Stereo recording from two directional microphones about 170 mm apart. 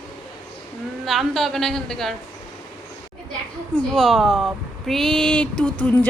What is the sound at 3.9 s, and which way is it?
A woman's voice, centre (ahead or behind).